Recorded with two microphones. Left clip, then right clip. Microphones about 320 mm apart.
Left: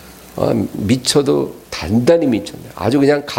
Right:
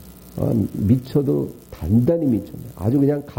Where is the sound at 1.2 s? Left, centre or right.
Centre.